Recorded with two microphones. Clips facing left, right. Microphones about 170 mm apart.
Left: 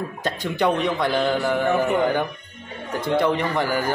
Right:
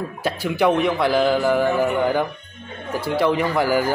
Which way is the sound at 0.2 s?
10° right (ahead or behind).